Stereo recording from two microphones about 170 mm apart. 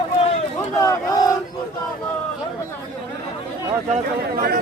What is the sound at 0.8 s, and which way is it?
Crowd, 20° left (ahead or behind).